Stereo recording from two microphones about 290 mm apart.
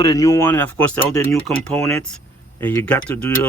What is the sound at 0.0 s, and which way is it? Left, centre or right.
Speech, centre.